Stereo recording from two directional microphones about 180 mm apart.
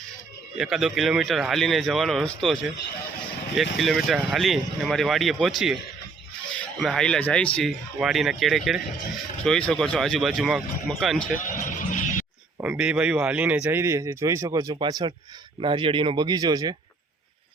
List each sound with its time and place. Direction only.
0.5 s speech: centre (ahead or behind)
11.4 s music: 45° left (ahead or behind)
12.5 s speech: 10° right (ahead or behind)